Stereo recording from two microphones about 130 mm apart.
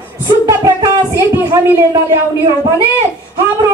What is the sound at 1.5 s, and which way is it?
Speech, 20° right (ahead or behind).